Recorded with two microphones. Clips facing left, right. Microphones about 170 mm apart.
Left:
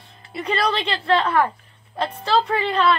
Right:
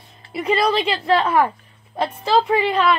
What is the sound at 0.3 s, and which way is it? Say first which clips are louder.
Speech: right 4 dB; 10° right (ahead or behind).